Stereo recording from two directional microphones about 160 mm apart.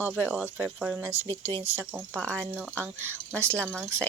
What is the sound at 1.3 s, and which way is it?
Speech, 30° right (ahead or behind).